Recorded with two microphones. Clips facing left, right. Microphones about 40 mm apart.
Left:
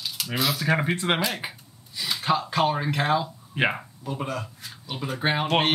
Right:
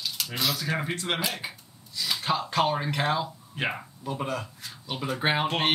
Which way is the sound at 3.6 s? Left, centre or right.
Left.